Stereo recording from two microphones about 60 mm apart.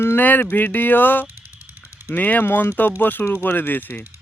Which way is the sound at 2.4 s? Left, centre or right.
Left.